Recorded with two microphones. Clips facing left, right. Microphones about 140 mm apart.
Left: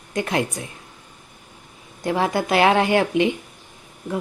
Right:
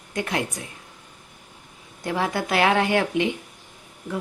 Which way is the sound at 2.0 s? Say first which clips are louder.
Left 4 dB; 25° left (ahead or behind).